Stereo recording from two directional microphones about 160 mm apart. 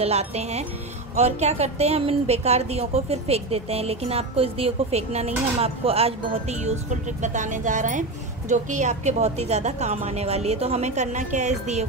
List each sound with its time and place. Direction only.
0.0 s a woman's voice: 40° right (ahead or behind)